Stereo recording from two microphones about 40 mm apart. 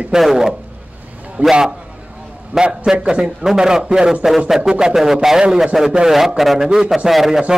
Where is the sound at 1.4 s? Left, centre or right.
Right.